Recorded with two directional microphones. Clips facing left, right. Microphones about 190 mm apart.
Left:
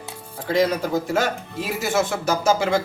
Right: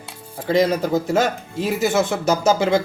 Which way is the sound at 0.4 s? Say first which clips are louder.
Right 3 dB; 20° right (ahead or behind).